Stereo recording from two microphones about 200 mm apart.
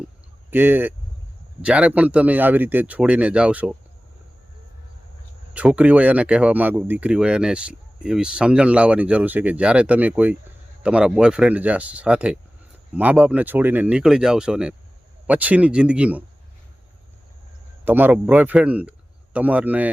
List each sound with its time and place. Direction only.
0.5 s speech: 10° right (ahead or behind)
5.5 s speech: 5° right (ahead or behind)
17.8 s a man's voice: 10° right (ahead or behind)